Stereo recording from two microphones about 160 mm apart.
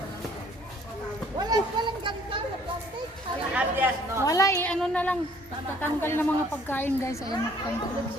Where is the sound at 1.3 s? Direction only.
25° right (ahead or behind).